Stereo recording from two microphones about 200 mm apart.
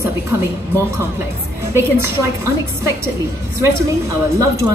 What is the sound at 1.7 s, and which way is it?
Speech, 15° right (ahead or behind).